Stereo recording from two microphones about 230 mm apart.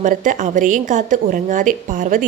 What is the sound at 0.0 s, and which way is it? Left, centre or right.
A woman's voice, right.